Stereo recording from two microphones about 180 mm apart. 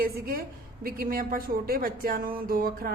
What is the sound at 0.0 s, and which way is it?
A woman's voice, 55° right (ahead or behind).